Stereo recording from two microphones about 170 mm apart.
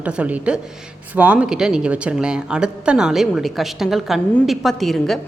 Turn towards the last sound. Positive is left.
turn(degrees=0)  # may be behind; listen again after turning